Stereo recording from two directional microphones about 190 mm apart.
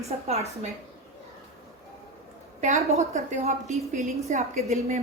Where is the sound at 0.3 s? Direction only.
35° right (ahead or behind).